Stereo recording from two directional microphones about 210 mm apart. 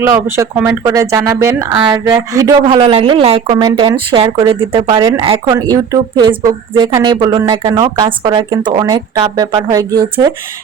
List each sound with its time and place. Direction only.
0.0 s speech: 10° right (ahead or behind)